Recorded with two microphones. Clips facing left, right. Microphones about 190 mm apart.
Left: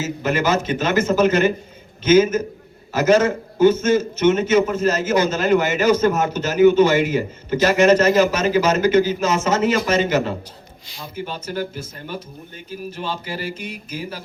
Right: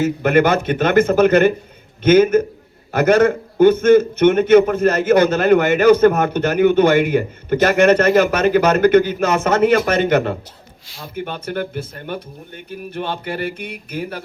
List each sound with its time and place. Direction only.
0.0 s a man's voice: 60° right (ahead or behind)